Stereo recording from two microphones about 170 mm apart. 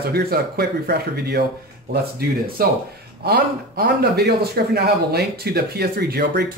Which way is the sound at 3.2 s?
65° right (ahead or behind).